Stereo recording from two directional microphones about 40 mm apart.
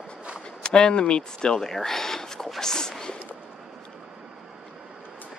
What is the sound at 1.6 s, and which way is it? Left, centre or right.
Speech, centre.